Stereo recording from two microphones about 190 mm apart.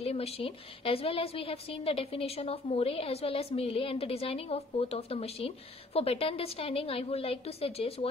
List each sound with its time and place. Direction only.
0.0 s a woman's voice: 30° left (ahead or behind)